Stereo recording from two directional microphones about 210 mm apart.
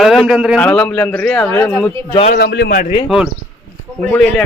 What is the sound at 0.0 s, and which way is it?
A man's voice, centre (ahead or behind).